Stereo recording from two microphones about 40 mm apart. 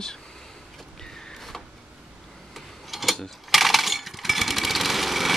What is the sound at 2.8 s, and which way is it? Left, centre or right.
Mechanisms, centre.